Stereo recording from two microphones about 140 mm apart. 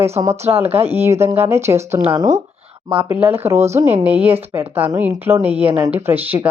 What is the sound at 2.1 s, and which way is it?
Speech, 30° right (ahead or behind).